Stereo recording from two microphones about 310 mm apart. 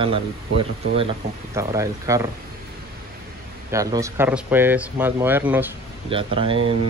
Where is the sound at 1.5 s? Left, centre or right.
Centre.